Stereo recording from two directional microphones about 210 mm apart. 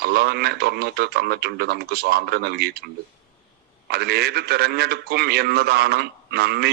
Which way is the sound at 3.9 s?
50° right (ahead or behind).